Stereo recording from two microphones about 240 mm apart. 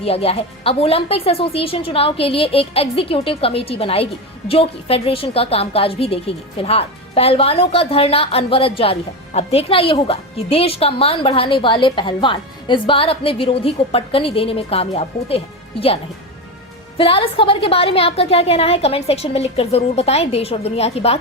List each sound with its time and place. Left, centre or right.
0.0 s speech: left
17.0 s speech: left